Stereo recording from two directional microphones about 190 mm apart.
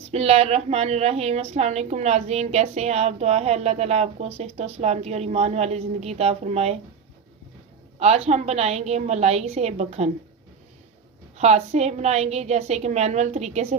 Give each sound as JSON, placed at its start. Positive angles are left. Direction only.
{"t": 0.1, "sound": "a woman's voice", "side_deg": -30}
{"t": 7.9, "sound": "a woman's voice", "side_deg": -35}
{"t": 11.3, "sound": "a woman's voice", "side_deg": -35}